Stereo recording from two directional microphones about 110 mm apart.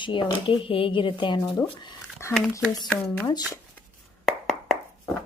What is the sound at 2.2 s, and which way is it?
Speech, 25° left (ahead or behind).